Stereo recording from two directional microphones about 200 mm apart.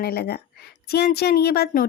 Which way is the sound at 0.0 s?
50° left (ahead or behind).